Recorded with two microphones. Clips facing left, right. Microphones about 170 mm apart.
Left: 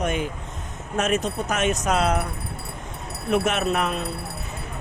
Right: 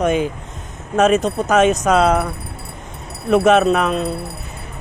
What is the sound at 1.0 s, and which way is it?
Speech, 90° right.